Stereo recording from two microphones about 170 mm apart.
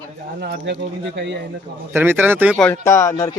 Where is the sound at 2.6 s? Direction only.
10° left (ahead or behind).